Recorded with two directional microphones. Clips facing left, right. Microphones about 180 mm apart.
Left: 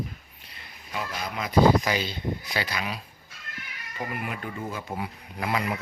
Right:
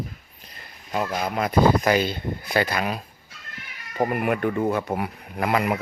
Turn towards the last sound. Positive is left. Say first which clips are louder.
# right 6 dB
turn(degrees=-60)  # may be behind; listen again after turning